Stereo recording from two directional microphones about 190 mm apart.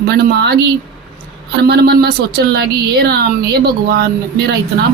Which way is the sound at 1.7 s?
55° right (ahead or behind).